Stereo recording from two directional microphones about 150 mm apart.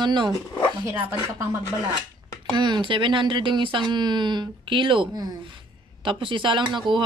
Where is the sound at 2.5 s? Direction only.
30° right (ahead or behind).